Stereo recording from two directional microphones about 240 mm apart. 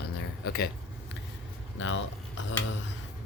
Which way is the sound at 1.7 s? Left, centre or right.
Left.